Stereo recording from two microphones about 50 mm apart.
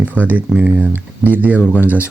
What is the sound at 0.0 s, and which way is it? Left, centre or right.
Speech, right.